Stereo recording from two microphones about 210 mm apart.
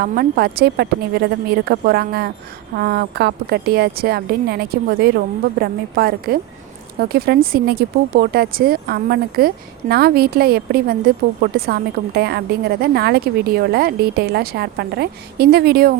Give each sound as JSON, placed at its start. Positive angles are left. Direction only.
{"t": 0.0, "sound": "a woman's voice", "side_deg": -45}